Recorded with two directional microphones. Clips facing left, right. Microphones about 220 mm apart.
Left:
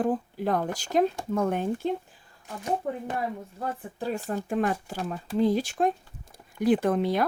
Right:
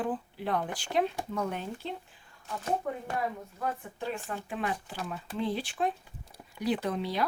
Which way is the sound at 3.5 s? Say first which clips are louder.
Left 2 dB; 35° left (ahead or behind).